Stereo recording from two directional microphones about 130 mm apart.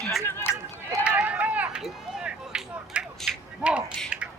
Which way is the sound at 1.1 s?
10° right (ahead or behind).